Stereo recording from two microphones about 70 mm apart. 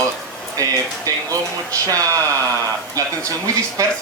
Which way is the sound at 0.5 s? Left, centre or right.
Right.